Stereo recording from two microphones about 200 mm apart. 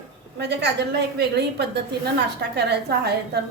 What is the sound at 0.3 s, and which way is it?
A woman's voice, 60° right (ahead or behind).